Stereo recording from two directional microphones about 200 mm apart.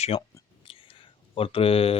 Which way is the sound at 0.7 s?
25° left (ahead or behind).